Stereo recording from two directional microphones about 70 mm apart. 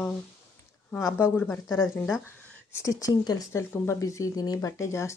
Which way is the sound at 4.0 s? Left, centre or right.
Left.